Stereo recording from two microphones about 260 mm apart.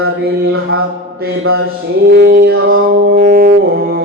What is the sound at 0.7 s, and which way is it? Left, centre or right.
Mantra, right.